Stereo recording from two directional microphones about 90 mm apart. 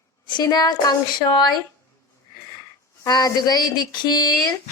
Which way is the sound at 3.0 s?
45° left (ahead or behind).